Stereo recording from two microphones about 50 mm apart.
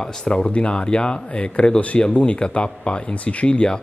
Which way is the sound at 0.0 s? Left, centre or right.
Centre.